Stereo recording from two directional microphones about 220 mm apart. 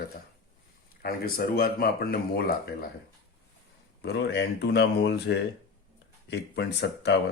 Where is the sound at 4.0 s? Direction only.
50° left (ahead or behind).